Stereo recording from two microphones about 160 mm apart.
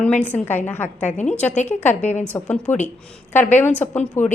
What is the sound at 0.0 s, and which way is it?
A woman's voice, 10° left (ahead or behind).